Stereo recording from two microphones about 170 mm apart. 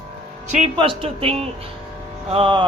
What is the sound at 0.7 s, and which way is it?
Speech, 30° right (ahead or behind).